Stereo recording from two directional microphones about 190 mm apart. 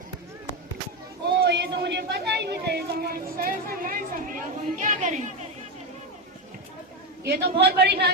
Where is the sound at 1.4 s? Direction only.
60° right (ahead or behind); by 5.2 s 40° right (ahead or behind).